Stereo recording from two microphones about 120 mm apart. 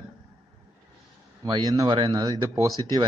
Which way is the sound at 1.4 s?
35° right (ahead or behind).